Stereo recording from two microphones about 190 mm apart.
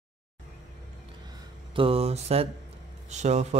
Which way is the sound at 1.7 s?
30° right (ahead or behind).